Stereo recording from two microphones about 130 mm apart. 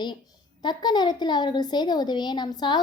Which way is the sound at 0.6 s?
35° left (ahead or behind).